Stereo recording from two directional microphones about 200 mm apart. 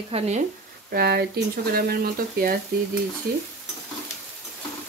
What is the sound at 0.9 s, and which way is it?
Speech, 50° right (ahead or behind).